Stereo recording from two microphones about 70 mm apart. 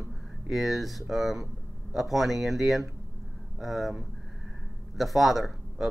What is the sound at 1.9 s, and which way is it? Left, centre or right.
Speech, centre.